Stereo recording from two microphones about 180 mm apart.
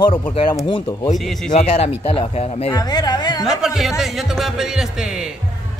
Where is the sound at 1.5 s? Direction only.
35° left (ahead or behind).